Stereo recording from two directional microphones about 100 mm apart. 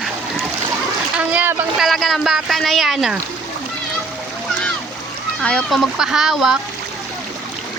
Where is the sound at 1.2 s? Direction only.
15° right (ahead or behind).